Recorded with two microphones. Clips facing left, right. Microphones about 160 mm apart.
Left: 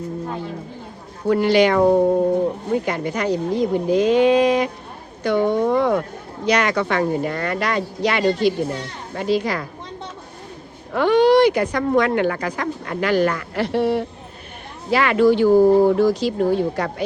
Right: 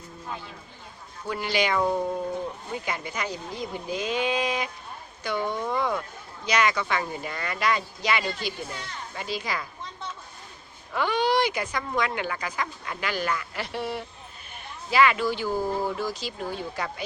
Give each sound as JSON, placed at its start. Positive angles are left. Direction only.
{"t": 0.3, "sound": "a sound", "side_deg": 40}
{"t": 1.3, "sound": "speech", "side_deg": 65}
{"t": 1.9, "sound": "speech", "side_deg": 45}
{"t": 2.8, "sound": "speech", "side_deg": 65}
{"t": 8.2, "sound": "speech", "side_deg": 30}
{"t": 9.1, "sound": "speech", "side_deg": 60}
{"t": 10.9, "sound": "speech", "side_deg": 65}
{"t": 14.8, "sound": "speech", "side_deg": 60}